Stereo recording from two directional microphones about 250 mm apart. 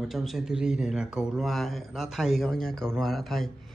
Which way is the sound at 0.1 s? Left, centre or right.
Centre.